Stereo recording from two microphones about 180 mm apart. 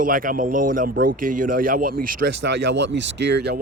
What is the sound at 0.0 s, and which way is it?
A man's voice, 50° right (ahead or behind).